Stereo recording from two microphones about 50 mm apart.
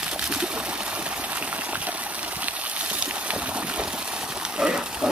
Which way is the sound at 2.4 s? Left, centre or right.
Right.